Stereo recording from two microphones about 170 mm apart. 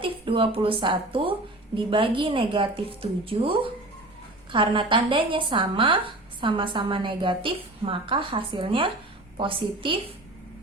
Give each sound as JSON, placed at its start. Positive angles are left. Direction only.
{"t": 0.0, "sound": "a woman's voice", "side_deg": -30}